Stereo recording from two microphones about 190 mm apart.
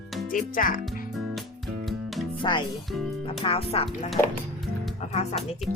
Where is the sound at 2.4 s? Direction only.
25° left (ahead or behind).